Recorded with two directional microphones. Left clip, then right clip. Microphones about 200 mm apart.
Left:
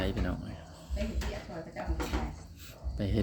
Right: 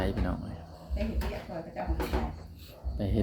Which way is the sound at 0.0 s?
10° left (ahead or behind).